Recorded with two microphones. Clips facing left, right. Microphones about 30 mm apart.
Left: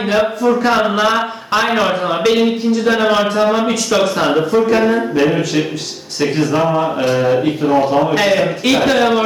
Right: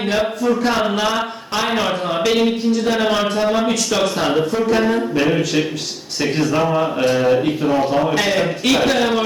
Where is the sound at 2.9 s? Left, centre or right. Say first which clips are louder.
Left 6 dB; centre.